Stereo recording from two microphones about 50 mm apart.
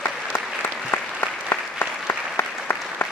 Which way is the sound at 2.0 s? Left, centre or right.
Left.